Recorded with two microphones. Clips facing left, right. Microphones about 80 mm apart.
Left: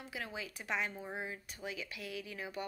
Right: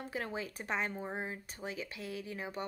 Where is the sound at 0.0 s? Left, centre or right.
Right.